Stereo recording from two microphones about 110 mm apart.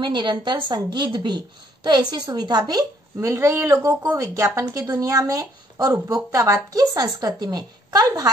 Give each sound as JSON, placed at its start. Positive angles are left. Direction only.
{"t": 0.0, "sound": "a woman's voice", "side_deg": -45}